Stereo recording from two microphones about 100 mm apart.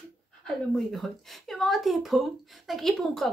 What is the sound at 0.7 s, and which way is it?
Speech, centre (ahead or behind).